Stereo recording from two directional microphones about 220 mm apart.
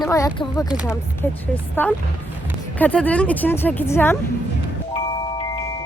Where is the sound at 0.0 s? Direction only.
15° left (ahead or behind).